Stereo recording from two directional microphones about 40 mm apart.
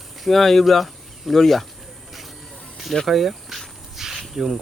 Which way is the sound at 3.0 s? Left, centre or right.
Centre.